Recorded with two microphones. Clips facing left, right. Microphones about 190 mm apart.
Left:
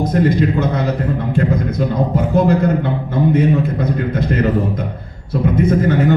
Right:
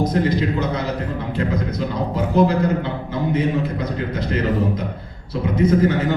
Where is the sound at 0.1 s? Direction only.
50° left (ahead or behind).